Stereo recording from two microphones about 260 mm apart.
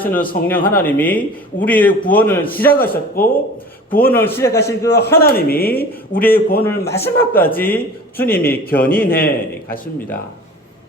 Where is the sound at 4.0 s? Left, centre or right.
Centre.